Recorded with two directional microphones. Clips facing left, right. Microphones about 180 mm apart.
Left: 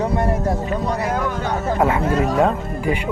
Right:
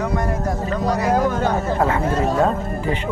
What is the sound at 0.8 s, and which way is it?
Speech, 35° right (ahead or behind).